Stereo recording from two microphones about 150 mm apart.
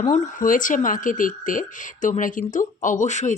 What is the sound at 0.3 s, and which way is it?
Speech, 60° left (ahead or behind).